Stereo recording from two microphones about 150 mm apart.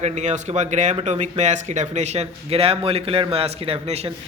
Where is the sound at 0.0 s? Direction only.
50° right (ahead or behind).